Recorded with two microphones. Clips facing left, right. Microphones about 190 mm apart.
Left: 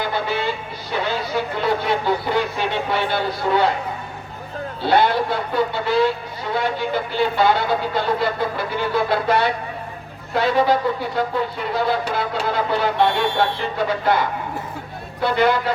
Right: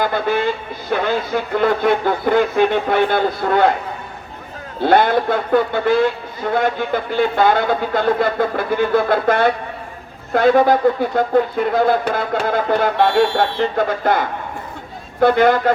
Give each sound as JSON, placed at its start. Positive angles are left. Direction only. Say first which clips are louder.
{"t": 0.0, "sound": "music", "louder": "right 5 dB", "side_deg": -50}
{"t": 0.9, "sound": "speech", "louder": "right 4 dB", "side_deg": -55}
{"t": 4.9, "sound": "speech", "louder": "right 3 dB", "side_deg": -50}